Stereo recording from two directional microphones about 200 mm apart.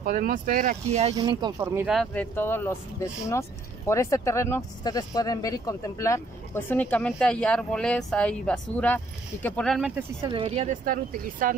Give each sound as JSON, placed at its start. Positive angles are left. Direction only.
{"t": 0.0, "sound": "speech", "side_deg": -45}
{"t": 1.1, "sound": "speech", "side_deg": -20}
{"t": 1.8, "sound": "speech", "side_deg": 0}
{"t": 10.2, "sound": "speech", "side_deg": -25}